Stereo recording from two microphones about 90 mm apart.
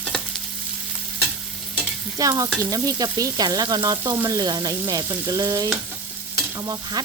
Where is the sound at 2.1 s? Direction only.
40° right (ahead or behind).